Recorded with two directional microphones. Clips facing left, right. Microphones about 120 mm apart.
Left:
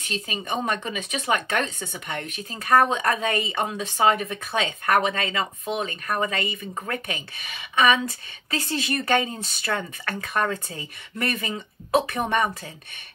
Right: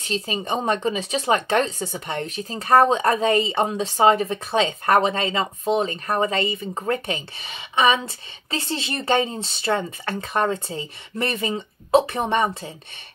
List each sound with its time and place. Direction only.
0.0 s speech: 30° right (ahead or behind)